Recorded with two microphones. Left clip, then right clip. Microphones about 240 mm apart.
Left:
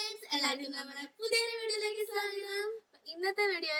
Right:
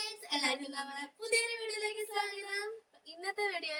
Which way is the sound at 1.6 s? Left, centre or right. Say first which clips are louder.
Left 3 dB; centre.